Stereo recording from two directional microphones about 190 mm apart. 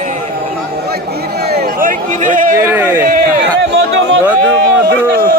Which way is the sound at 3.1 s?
55° right (ahead or behind).